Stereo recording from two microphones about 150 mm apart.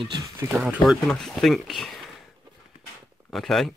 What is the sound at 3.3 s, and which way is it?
Speech, centre (ahead or behind).